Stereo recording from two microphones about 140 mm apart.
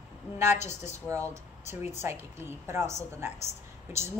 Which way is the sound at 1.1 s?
20° right (ahead or behind).